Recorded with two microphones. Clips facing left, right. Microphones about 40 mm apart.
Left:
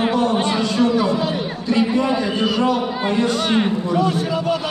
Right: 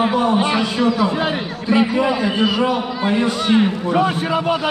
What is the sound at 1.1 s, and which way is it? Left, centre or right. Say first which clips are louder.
Speech: right 1 dB; right.